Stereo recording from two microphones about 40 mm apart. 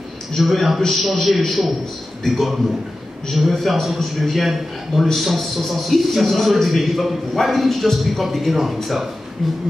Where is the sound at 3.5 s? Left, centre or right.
Centre.